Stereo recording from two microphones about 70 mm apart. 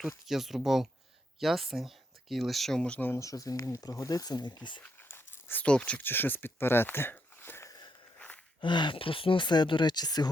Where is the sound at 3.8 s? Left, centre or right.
Left.